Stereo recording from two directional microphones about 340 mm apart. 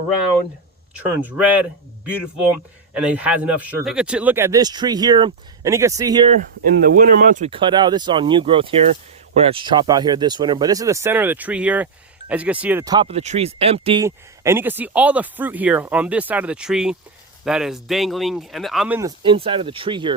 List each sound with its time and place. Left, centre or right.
0.9 s speech: centre
2.9 s speech: centre
6.7 s speech: right